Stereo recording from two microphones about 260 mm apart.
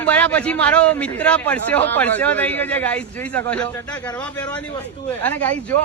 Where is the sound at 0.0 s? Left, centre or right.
Centre.